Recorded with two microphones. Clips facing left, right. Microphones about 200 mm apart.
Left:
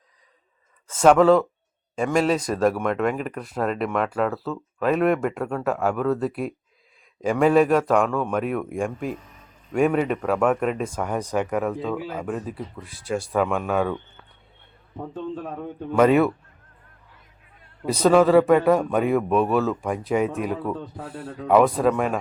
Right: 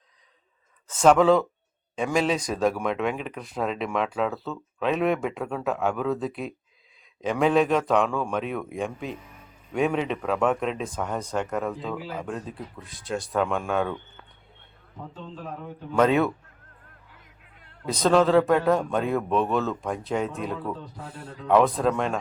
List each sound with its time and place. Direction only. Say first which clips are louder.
0.9 s a man's voice: left 3 dB; 5° left (ahead or behind)
11.6 s speech: left 4 dB; centre (ahead or behind)
16.0 s a man's voice: left 4 dB; 5° left (ahead or behind)
17.8 s a man's voice: left 4 dB; 10° left (ahead or behind)
20.9 s a man's voice: left 5 dB; 65° left (ahead or behind)
21.4 s a man's voice: left 3 dB; 10° left (ahead or behind)